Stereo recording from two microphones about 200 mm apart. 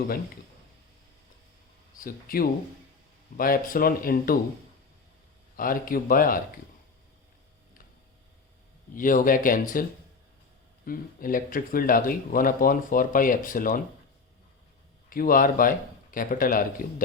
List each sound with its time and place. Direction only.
2.0 s speech: 45° left (ahead or behind)
5.5 s speech: 45° left (ahead or behind)
9.0 s speech: 40° left (ahead or behind)
10.8 s speech: 45° left (ahead or behind)
15.1 s speech: 45° left (ahead or behind)